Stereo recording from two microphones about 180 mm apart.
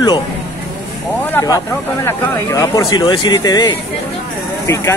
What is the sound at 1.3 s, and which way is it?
Speech, 20° left (ahead or behind).